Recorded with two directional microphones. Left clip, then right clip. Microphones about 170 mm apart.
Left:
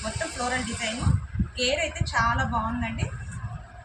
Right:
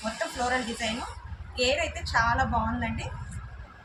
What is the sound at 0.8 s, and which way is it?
A woman's voice, 5° right (ahead or behind).